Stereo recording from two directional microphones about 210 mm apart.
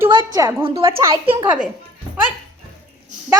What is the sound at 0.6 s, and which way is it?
Speech, 25° right (ahead or behind).